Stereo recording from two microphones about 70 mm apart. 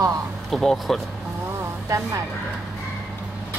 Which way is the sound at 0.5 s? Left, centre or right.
Centre.